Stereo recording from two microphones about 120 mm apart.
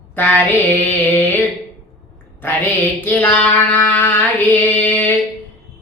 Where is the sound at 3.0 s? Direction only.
15° left (ahead or behind).